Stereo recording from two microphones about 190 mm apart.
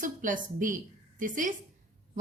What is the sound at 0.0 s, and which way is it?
A woman's voice, 45° right (ahead or behind).